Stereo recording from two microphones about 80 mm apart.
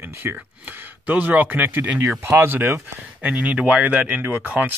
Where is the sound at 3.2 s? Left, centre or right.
Centre.